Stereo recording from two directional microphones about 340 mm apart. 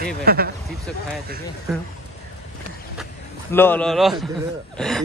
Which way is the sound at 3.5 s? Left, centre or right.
Centre.